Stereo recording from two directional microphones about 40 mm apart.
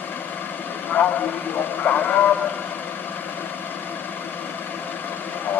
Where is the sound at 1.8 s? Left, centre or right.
Left.